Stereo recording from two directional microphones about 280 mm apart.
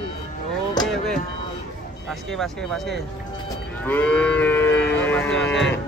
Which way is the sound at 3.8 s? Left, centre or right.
Centre.